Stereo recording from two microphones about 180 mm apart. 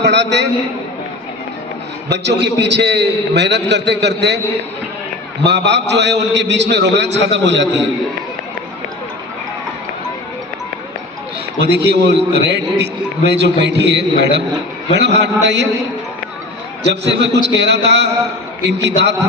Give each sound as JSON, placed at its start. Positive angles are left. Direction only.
{"t": 0.0, "sound": "a man's voice", "side_deg": -70}
{"t": 2.0, "sound": "a man's voice", "side_deg": -70}
{"t": 5.4, "sound": "a man's voice", "side_deg": -70}
{"t": 11.6, "sound": "a man's voice", "side_deg": -65}
{"t": 17.1, "sound": "a man's voice", "side_deg": -75}